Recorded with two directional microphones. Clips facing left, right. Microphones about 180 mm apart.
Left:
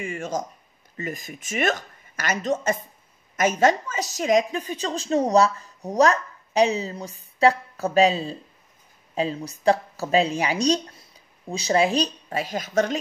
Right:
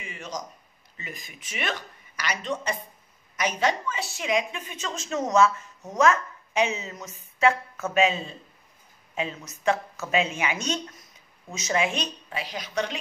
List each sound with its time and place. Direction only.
0.0 s a woman's voice: 50° left (ahead or behind)